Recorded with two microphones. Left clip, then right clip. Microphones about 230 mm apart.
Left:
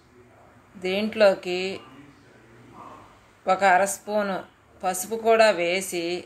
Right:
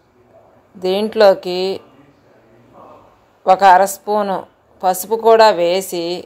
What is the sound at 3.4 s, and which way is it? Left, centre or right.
Speech, right.